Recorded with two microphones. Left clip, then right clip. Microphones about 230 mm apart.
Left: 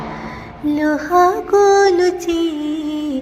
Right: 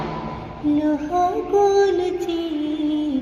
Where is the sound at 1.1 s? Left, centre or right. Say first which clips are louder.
Left 7 dB; left.